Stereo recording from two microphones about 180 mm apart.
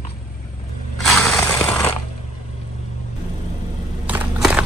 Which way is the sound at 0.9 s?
Centre (ahead or behind).